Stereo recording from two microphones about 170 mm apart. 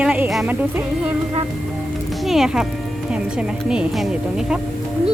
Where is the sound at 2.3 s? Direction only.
5° right (ahead or behind).